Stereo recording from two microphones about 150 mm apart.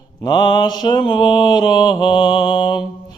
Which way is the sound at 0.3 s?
30° left (ahead or behind).